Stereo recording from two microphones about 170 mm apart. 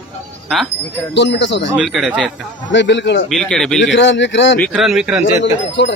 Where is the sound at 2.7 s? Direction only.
90° left.